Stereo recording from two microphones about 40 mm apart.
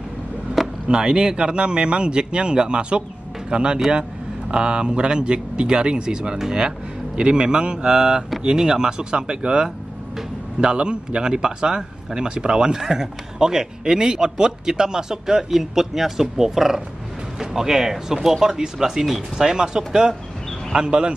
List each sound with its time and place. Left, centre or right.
0.8 s a man's voice: right